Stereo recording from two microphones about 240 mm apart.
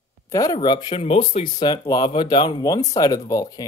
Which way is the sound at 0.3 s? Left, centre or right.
Centre.